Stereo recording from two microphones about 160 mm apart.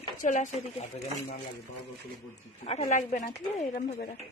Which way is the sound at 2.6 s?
40° left (ahead or behind).